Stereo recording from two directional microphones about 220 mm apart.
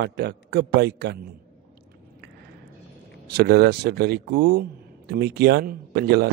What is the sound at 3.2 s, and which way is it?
A man's voice, 45° right (ahead or behind).